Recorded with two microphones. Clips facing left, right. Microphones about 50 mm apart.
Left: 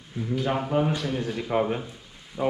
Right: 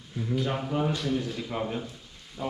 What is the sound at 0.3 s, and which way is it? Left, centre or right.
Speech, centre.